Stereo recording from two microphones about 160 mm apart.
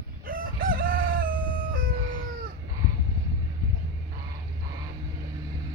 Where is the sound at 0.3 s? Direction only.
60° right (ahead or behind).